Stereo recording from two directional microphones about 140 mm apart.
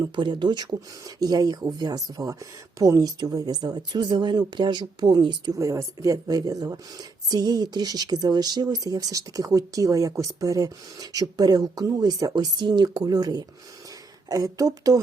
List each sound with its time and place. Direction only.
0.0 s speech: 35° right (ahead or behind)